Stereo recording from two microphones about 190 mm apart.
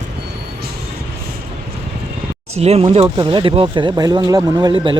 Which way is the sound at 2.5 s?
35° right (ahead or behind).